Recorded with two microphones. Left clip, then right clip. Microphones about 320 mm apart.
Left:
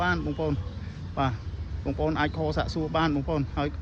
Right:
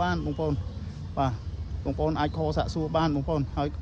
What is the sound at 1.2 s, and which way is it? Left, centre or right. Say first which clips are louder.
A man's voice: even; centre.